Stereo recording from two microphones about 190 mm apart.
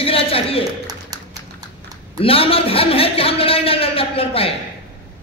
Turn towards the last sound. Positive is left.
turn(degrees=30)  # may be behind; listen again after turning